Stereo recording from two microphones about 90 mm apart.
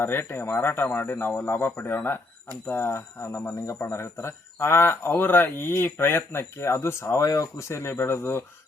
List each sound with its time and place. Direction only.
0.0 s speech: 25° left (ahead or behind)